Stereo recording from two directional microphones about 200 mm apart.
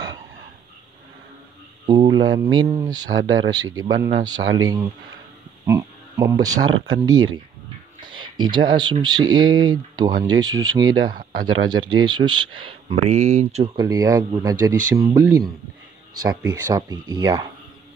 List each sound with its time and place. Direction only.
1.9 s speech: 20° right (ahead or behind)
3.1 s speech: 80° right
3.7 s speech: 20° right (ahead or behind)
8.0 s speech: 25° right (ahead or behind)
13.0 s speech: 35° right (ahead or behind)
13.8 s speech: 15° right (ahead or behind)